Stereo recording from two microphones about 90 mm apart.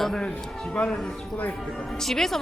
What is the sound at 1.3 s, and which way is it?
Speech, 15° left (ahead or behind).